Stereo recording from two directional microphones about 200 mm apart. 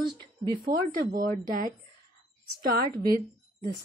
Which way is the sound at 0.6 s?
45° right (ahead or behind).